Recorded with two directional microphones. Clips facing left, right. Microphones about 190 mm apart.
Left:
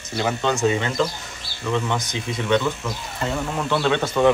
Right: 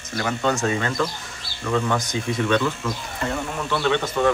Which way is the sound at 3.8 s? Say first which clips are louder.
Left 2 dB; 15° left (ahead or behind).